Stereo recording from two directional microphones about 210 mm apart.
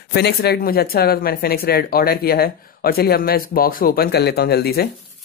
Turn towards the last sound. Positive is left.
turn(degrees=50)  # may be behind; listen again after turning